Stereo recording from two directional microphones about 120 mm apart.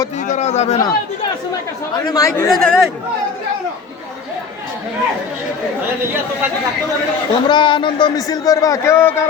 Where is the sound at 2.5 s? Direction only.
5° left (ahead or behind).